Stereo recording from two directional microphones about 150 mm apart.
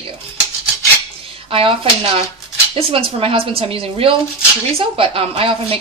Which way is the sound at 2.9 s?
35° right (ahead or behind).